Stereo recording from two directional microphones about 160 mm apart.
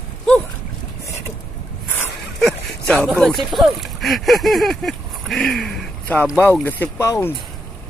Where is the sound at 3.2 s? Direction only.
Centre (ahead or behind); by 7.3 s 20° left (ahead or behind).